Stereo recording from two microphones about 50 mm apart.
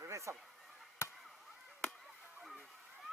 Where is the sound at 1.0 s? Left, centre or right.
Left.